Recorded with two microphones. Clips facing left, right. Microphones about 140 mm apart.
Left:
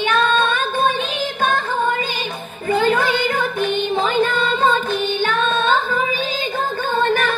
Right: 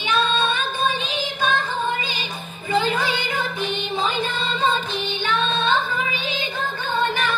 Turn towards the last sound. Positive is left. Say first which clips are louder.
# left 4 dB
turn(degrees=50)  # may be behind; listen again after turning